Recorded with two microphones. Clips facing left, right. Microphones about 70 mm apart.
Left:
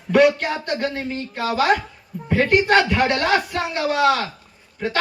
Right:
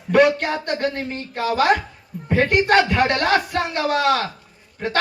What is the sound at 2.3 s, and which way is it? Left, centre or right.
Speech, right.